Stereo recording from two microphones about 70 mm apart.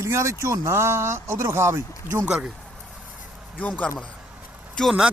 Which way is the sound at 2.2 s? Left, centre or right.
Centre.